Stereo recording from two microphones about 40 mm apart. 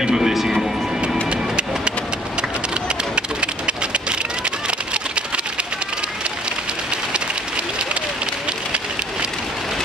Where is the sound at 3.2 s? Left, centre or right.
Right.